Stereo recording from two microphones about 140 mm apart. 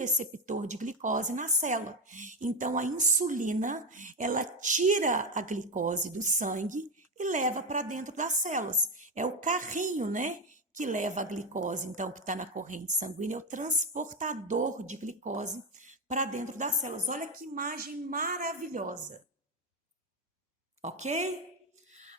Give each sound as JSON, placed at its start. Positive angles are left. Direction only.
{"t": 0.0, "sound": "a woman's voice", "side_deg": -60}
{"t": 20.8, "sound": "a woman's voice", "side_deg": -55}
{"t": 21.9, "sound": "a sound", "side_deg": -55}